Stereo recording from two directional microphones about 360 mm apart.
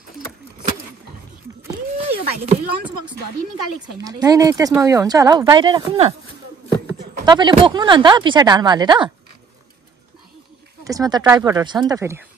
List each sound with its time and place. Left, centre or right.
2.0 s a sound: centre
4.0 s speech: centre
7.2 s speech: centre
10.8 s speech: centre